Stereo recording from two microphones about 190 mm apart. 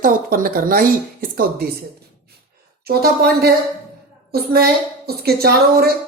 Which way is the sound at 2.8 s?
55° right (ahead or behind).